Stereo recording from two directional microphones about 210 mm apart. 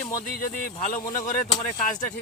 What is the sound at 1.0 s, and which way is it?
Speech, 15° left (ahead or behind).